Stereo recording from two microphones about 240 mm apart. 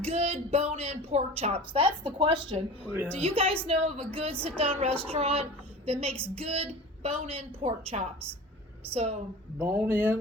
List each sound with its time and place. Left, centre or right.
0.0 s a woman's voice: right
2.8 s speech: centre
3.2 s a woman's voice: right
9.6 s speech: centre